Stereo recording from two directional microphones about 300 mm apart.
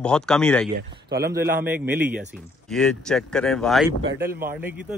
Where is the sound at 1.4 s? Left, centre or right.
Centre.